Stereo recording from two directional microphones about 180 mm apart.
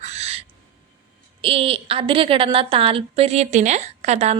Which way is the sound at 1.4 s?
30° right (ahead or behind).